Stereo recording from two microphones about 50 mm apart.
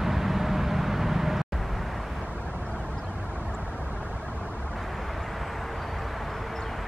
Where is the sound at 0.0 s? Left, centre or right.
Centre.